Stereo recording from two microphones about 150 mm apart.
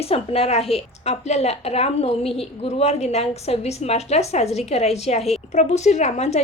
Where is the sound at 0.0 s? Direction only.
40° left (ahead or behind).